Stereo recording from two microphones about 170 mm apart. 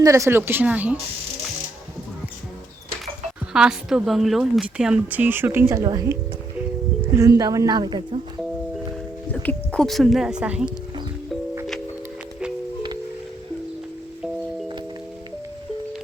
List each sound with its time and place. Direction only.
0.0 s a woman's voice: 15° right (ahead or behind)
3.5 s a woman's voice: 5° right (ahead or behind); by 8.2 s 25° right (ahead or behind)
9.3 s a woman's voice: 10° left (ahead or behind); by 10.7 s 5° right (ahead or behind)